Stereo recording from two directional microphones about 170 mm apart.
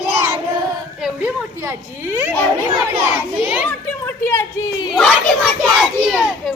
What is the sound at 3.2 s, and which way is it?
Speech, 10° right (ahead or behind).